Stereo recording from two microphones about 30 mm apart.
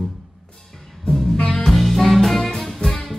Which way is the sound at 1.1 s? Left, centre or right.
Left.